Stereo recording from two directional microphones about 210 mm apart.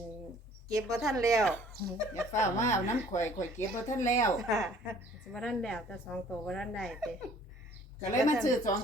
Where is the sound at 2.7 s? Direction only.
35° left (ahead or behind).